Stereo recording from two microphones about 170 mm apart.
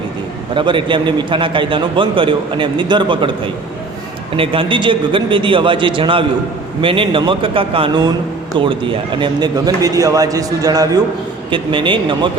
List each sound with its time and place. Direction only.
0.5 s a man's voice: 30° right (ahead or behind)